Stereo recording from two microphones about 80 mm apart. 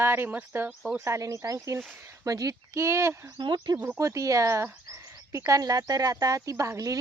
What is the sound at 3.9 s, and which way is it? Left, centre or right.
Speech, right.